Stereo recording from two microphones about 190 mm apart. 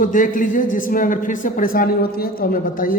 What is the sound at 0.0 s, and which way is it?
Speech, 45° left (ahead or behind).